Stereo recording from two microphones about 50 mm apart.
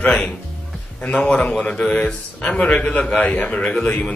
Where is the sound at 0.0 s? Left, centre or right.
Left.